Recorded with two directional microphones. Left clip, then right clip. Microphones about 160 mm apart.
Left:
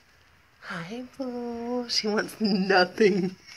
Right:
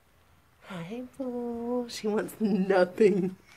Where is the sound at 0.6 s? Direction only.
10° right (ahead or behind).